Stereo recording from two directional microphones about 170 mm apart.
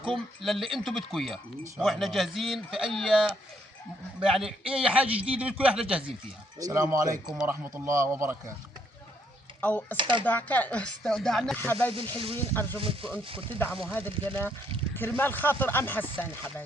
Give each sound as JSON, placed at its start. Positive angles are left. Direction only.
{"t": 0.4, "sound": "a man's voice", "side_deg": 0}
{"t": 6.6, "sound": "a man's voice", "side_deg": -20}
{"t": 9.6, "sound": "speech", "side_deg": 10}
{"t": 10.0, "sound": "speech", "side_deg": -30}
{"t": 10.2, "sound": "speech", "side_deg": 10}
{"t": 12.1, "sound": "speech", "side_deg": -30}
{"t": 12.5, "sound": "speech", "side_deg": 10}
{"t": 12.8, "sound": "speech", "side_deg": -30}
{"t": 13.8, "sound": "speech", "side_deg": 10}